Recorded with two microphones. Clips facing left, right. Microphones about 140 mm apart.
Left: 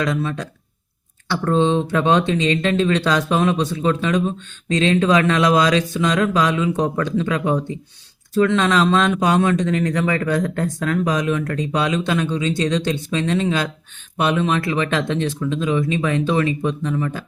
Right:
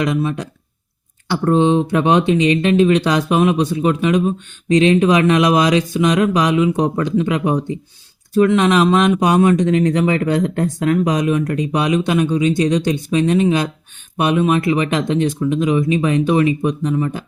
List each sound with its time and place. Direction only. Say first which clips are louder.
0.0 s speech: right 3 dB; 15° right (ahead or behind)